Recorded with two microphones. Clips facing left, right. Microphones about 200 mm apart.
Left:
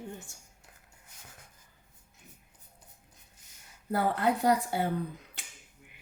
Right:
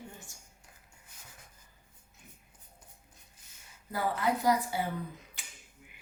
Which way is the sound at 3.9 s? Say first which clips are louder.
Left 3 dB; 60° left (ahead or behind).